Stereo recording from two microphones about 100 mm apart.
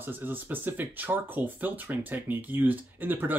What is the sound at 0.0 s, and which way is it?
Speech, 20° right (ahead or behind).